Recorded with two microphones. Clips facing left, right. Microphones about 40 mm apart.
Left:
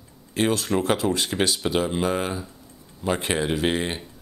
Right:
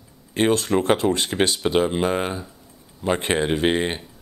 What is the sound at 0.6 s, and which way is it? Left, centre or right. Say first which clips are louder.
Speech: right 3 dB; centre.